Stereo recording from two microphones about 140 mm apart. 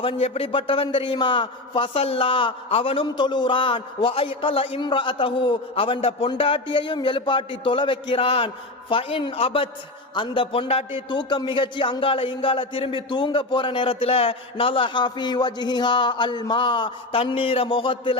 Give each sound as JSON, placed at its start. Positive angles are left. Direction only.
{"t": 0.0, "sound": "a man's voice", "side_deg": 45}